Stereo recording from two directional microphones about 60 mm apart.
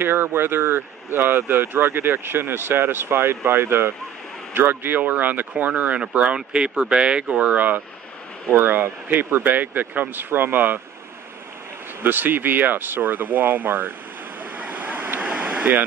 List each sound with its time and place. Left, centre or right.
0.0 s speech: right
12.0 s speech: right
14.4 s waves: right
15.2 s vehicle: centre